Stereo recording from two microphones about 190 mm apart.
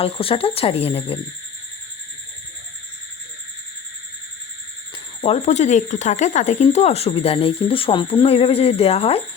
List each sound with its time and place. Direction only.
0.0 s speech: 30° left (ahead or behind)
5.2 s speech: 35° left (ahead or behind)